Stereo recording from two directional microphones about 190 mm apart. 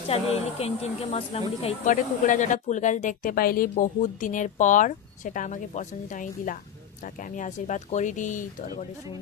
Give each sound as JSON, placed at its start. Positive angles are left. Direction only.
{"t": 0.1, "sound": "speech", "side_deg": 30}